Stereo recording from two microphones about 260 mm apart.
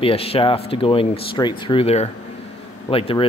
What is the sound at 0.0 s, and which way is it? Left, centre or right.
Speech, left.